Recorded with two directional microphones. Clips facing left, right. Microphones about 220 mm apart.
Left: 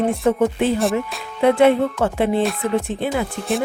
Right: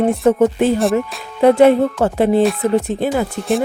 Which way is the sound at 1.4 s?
40° right (ahead or behind).